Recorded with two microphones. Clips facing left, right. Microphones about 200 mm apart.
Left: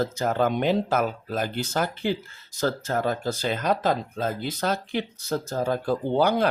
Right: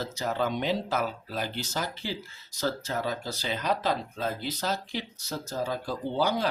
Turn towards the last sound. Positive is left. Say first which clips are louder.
# left 6 dB
turn(degrees=55)  # may be behind; listen again after turning